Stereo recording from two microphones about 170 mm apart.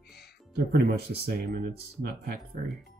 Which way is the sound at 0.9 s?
65° right (ahead or behind).